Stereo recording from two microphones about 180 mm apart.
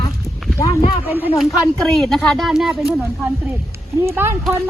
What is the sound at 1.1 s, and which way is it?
Speech, 10° right (ahead or behind).